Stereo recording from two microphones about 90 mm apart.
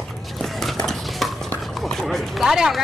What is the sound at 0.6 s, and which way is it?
Dishes, 5° left (ahead or behind).